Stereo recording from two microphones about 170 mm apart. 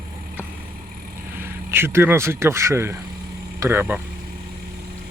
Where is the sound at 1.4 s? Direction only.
15° right (ahead or behind).